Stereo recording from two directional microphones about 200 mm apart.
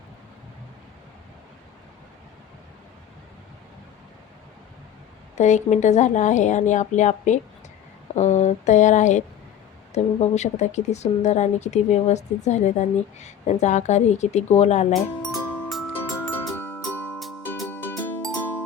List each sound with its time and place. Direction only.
5.4 s speech: 35° left (ahead or behind)
15.3 s music: 5° left (ahead or behind)